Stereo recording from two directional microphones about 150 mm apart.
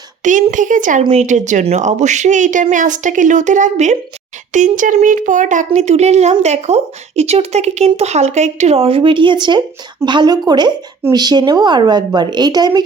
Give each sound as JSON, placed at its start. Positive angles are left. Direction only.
{"t": 0.2, "sound": "a child's voice", "side_deg": -55}
{"t": 1.0, "sound": "a child's voice", "side_deg": -45}